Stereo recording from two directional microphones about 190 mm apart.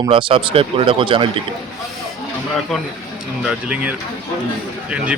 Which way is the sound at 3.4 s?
5° right (ahead or behind).